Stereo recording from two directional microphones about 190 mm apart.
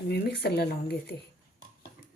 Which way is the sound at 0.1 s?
60° left (ahead or behind).